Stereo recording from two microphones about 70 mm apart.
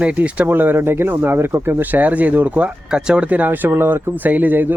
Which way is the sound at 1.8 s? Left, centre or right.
Right.